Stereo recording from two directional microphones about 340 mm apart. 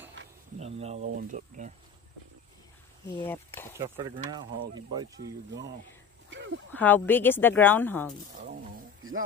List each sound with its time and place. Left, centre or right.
0.2 s a sound: right
0.6 s speech: centre
3.1 s speech: centre
3.7 s speech: centre
6.3 s a sound: right
6.7 s speech: centre